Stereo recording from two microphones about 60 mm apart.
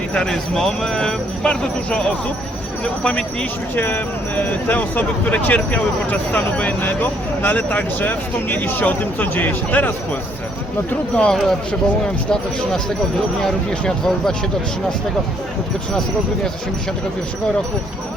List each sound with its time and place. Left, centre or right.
0.1 s speech: centre
3.8 s speech: left
11.1 s speech: centre